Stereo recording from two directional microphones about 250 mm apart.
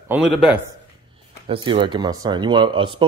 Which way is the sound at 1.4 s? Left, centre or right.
Right.